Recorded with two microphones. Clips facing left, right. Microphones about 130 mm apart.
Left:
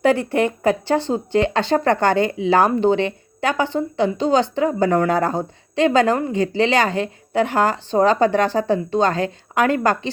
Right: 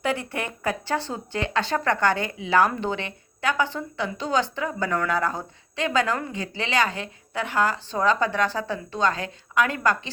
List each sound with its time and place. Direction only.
0.0 s speech: 35° left (ahead or behind)